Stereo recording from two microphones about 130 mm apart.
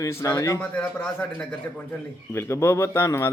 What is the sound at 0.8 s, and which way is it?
Speech, 10° left (ahead or behind).